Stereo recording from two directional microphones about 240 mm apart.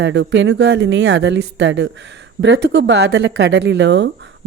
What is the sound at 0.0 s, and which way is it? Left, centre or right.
Speech, right.